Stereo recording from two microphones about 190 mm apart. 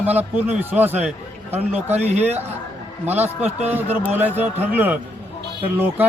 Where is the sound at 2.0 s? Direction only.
35° right (ahead or behind).